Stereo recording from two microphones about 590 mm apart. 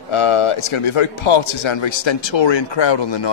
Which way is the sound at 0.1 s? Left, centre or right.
Left.